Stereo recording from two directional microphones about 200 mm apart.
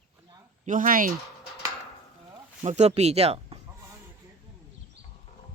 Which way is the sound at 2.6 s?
35° right (ahead or behind).